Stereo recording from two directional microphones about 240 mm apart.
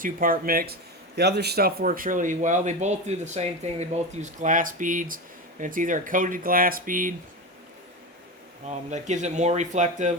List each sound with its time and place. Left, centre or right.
0.0 s a man's voice: right
8.6 s speech: right